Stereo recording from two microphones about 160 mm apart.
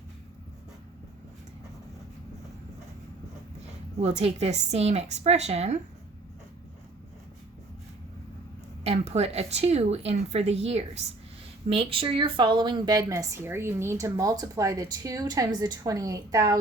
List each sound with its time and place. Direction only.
3.9 s a woman's voice: 40° right (ahead or behind)
8.8 s speech: 40° right (ahead or behind); by 16.6 s 20° right (ahead or behind)